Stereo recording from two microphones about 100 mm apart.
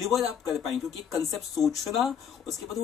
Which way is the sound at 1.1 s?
35° left (ahead or behind).